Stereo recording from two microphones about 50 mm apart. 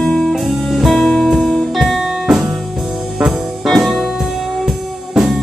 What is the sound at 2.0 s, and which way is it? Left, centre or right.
Music, centre.